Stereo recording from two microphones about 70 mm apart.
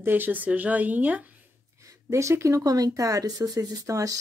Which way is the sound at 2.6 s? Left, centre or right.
Right.